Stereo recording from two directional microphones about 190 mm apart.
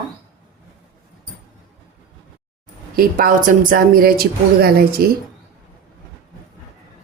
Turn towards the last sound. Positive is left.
turn(degrees=-55)  # may be behind; listen again after turning